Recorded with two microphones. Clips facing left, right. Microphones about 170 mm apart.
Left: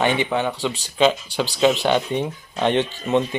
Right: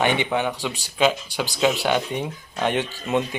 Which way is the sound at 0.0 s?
15° right (ahead or behind).